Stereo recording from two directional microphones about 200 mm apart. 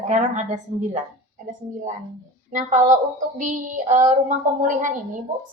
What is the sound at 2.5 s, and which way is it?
A woman's voice, 40° right (ahead or behind).